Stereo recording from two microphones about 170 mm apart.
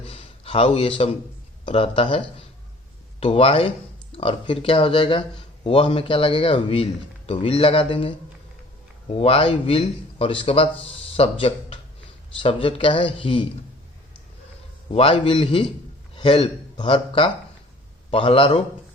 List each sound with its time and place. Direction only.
0.0 s a sound: 35° left (ahead or behind)
1.6 s speech: 35° left (ahead or behind)
14.9 s speech: 35° left (ahead or behind)